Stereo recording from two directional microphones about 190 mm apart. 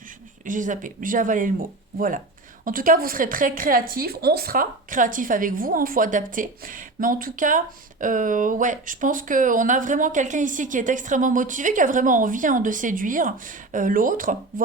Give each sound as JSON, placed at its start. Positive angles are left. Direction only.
{"t": 0.4, "sound": "speech", "side_deg": -45}